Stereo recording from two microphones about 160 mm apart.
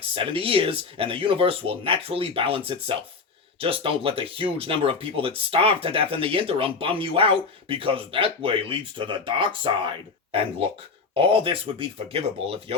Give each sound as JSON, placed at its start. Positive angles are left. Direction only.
{"t": 0.1, "sound": "speech", "side_deg": -35}
{"t": 11.1, "sound": "speech", "side_deg": -35}